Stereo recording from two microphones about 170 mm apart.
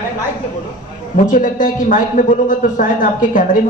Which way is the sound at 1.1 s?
50° left (ahead or behind).